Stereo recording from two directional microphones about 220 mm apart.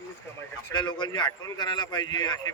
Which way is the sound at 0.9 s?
20° left (ahead or behind).